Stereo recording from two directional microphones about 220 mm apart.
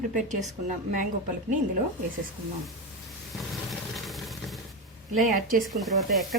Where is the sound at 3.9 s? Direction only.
Centre (ahead or behind).